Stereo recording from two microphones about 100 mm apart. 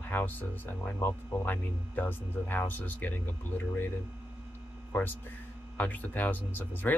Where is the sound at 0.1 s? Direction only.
20° left (ahead or behind).